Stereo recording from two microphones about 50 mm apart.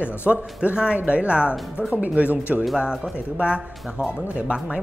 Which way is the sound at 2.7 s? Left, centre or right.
Centre.